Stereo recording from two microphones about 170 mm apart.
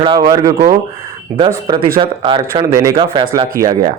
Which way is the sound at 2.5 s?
20° right (ahead or behind).